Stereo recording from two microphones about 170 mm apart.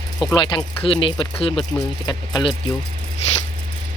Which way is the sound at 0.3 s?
25° left (ahead or behind).